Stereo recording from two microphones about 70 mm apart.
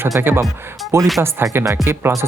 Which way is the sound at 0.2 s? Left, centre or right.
Right.